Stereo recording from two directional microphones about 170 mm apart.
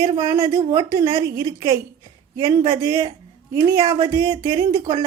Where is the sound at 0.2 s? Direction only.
15° right (ahead or behind).